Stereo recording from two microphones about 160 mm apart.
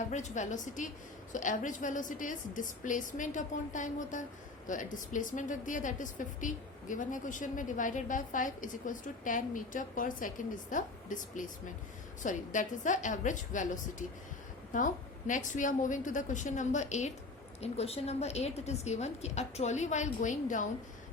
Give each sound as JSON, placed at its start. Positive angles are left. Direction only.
{"t": 0.1, "sound": "a woman's voice", "side_deg": 45}
{"t": 14.7, "sound": "a woman's voice", "side_deg": 55}